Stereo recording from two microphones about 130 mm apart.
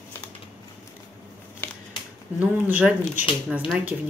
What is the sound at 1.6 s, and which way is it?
Scissors, 10° left (ahead or behind).